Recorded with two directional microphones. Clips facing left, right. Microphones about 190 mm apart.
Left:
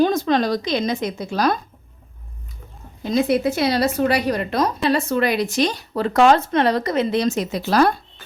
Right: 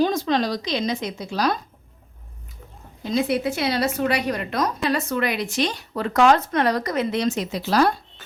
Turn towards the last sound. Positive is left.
turn(degrees=55)  # may be behind; listen again after turning